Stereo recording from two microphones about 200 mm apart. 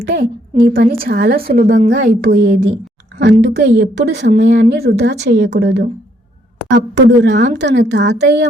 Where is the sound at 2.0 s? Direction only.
55° right (ahead or behind).